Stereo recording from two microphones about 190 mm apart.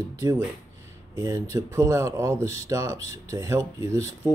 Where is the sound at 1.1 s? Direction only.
15° right (ahead or behind).